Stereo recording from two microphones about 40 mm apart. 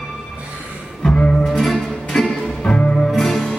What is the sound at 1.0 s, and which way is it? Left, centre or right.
Music, left.